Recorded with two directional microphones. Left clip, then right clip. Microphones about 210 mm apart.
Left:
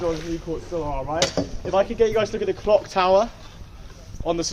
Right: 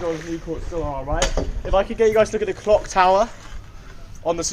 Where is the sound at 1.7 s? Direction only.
50° right (ahead or behind).